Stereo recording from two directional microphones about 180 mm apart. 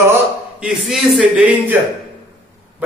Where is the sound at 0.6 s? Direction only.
5° right (ahead or behind).